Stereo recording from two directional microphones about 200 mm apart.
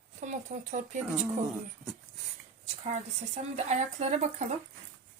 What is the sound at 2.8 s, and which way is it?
Speech, 35° right (ahead or behind).